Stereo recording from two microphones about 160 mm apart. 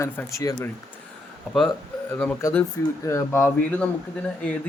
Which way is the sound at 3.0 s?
15° left (ahead or behind).